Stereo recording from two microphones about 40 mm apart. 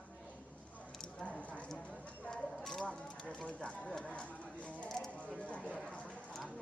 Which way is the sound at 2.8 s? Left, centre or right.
Left.